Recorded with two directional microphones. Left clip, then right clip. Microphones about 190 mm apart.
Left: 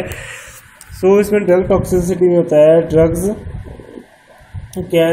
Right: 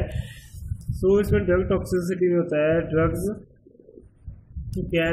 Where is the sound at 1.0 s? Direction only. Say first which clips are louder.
Left 9 dB; 5° left (ahead or behind).